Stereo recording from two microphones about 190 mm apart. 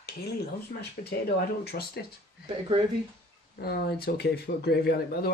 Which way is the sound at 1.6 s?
55° left (ahead or behind).